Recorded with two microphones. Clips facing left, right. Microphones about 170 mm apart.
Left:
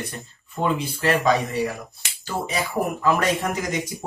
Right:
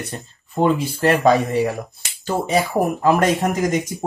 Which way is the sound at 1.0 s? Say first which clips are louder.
Right 4 dB; 50° right (ahead or behind).